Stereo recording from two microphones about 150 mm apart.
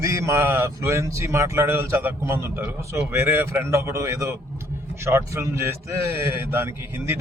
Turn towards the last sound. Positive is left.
turn(degrees=-15)  # may be behind; listen again after turning